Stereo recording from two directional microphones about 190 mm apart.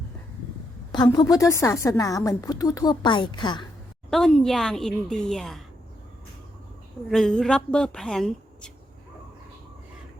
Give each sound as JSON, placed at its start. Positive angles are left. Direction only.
{"t": 0.9, "sound": "a woman's voice", "side_deg": 20}
{"t": 4.1, "sound": "a woman's voice", "side_deg": 5}
{"t": 7.1, "sound": "a woman's voice", "side_deg": 5}